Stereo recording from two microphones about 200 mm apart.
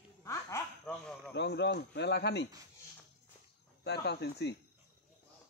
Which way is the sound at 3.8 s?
55° left (ahead or behind).